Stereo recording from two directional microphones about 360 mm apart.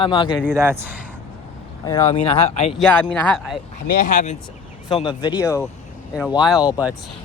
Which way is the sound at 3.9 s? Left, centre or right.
Left.